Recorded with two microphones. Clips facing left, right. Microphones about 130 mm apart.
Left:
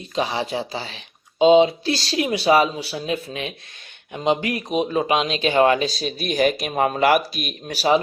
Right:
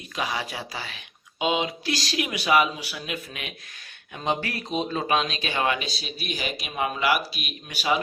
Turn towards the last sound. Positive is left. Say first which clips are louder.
# left 7 dB
turn(degrees=40)  # may be behind; listen again after turning